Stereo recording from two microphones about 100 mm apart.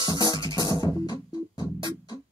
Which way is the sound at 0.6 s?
40° left (ahead or behind).